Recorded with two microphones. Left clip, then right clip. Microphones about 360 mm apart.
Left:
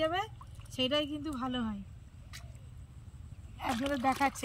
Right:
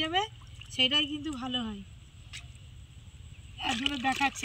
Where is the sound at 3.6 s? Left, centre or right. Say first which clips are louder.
Right 2 dB; centre.